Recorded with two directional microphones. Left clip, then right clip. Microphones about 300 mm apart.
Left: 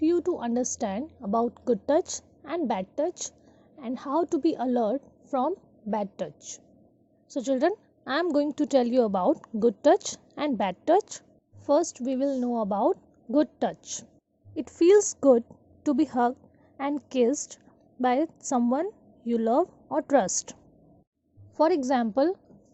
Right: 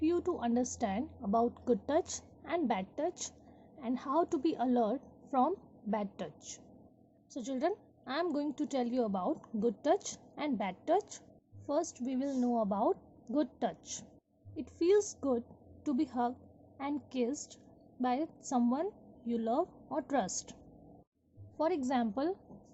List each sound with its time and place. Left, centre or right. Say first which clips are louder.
0.0 s a woman's voice: left 7 dB; centre
21.6 s a woman's voice: left 9 dB; left